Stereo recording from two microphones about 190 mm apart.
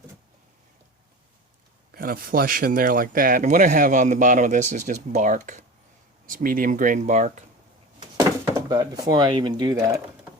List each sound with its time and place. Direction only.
1.9 s speech: 50° right (ahead or behind)
7.9 s speech: 20° right (ahead or behind)